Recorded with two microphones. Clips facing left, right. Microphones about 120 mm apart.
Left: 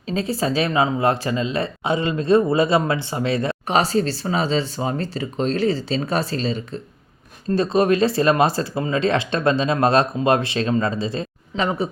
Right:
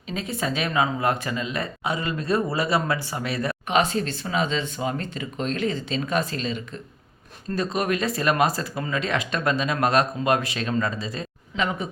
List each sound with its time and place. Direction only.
0.1 s speech: 30° left (ahead or behind)